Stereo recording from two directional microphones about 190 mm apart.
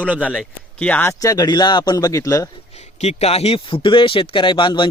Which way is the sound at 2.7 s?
35° left (ahead or behind).